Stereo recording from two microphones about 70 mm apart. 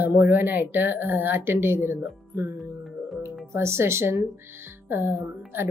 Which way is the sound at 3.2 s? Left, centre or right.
Right.